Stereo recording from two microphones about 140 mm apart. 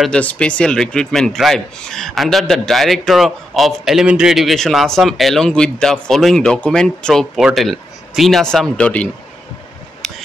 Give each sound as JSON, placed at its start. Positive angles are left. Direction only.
{"t": 0.0, "sound": "a man's voice", "side_deg": 10}